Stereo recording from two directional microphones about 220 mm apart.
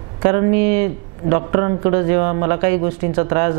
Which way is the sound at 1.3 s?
25° right (ahead or behind).